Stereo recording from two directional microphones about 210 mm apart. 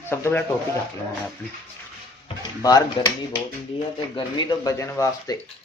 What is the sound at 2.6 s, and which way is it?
Speech, 15° left (ahead or behind).